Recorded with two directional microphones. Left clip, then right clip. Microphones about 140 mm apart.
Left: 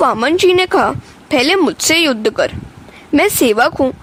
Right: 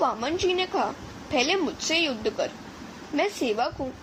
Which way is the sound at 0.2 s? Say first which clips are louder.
Left 14 dB; 90° left.